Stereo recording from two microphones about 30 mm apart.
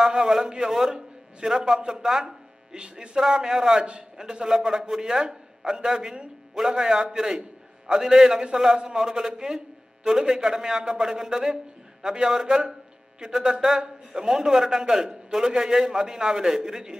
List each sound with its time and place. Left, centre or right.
0.0 s a man's voice: centre
2.7 s speech: right
3.2 s a man's voice: centre
10.9 s a man's voice: centre